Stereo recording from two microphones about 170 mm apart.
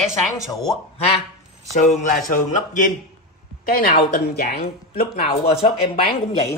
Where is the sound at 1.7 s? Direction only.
45° left (ahead or behind); by 5.3 s 60° left (ahead or behind).